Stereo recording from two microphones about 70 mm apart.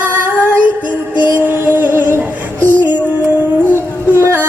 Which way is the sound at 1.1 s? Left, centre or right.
Right.